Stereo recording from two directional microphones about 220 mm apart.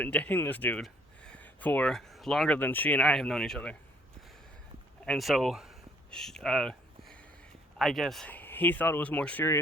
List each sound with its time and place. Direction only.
0.0 s speech: 5° left (ahead or behind)
5.0 s speech: centre (ahead or behind)